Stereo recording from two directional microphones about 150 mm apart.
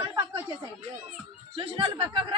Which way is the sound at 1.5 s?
40° right (ahead or behind).